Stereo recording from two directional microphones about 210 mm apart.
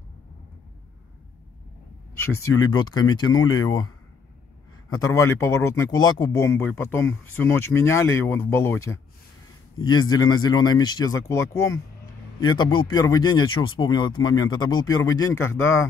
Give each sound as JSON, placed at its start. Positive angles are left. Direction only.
{"t": 2.7, "sound": "a man's voice", "side_deg": 20}